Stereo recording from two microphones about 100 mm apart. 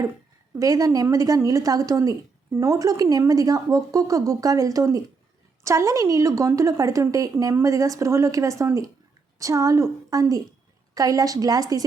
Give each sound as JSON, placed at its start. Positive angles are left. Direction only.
{"t": 0.6, "sound": "a woman's voice", "side_deg": -35}